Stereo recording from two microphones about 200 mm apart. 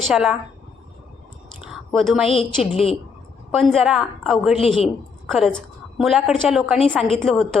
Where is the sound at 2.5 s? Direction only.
Centre (ahead or behind).